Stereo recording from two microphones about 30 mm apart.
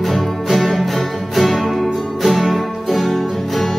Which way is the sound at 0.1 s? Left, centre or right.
Centre.